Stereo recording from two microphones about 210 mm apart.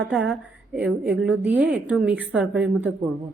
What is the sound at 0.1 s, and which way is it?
A woman's voice, centre (ahead or behind).